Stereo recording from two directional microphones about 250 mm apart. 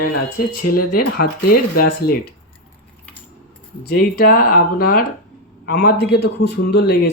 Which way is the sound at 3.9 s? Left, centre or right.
Left.